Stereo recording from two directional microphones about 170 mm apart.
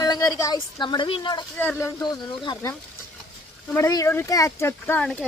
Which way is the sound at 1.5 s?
15° left (ahead or behind).